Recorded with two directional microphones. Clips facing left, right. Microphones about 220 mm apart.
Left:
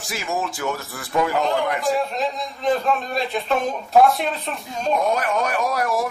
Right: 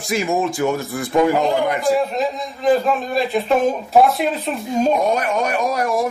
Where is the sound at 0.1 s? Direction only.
15° right (ahead or behind).